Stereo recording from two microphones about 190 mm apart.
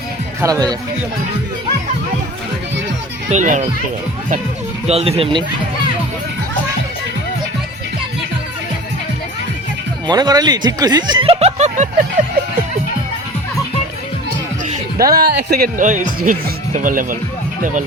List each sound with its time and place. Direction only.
0.4 s speech: 20° right (ahead or behind)
3.2 s speech: 40° right (ahead or behind)
4.9 s speech: 30° right (ahead or behind)
10.1 s speech: 20° right (ahead or behind); by 11.9 s 35° right (ahead or behind)
14.9 s speech: 50° right (ahead or behind)